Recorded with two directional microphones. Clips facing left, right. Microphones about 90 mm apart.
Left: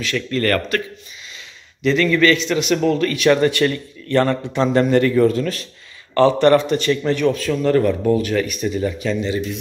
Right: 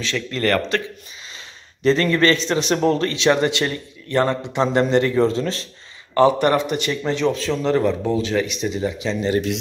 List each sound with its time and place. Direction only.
0.0 s a man's voice: 25° right (ahead or behind)
1.8 s a man's voice: 35° right (ahead or behind)
6.1 s a man's voice: 15° right (ahead or behind)